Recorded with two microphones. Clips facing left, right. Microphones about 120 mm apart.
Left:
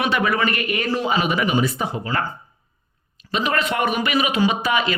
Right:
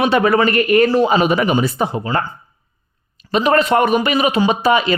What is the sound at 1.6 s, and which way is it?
Speech, 30° right (ahead or behind).